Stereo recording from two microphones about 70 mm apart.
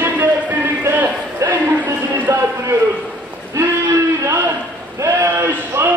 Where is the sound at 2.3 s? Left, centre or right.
Right.